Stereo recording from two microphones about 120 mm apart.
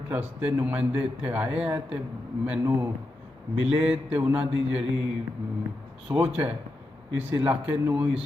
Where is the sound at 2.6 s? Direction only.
25° right (ahead or behind).